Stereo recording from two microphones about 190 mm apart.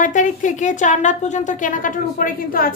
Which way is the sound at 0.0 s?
40° left (ahead or behind).